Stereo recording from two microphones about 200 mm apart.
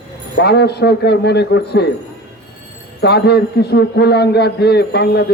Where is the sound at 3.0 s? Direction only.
55° left (ahead or behind).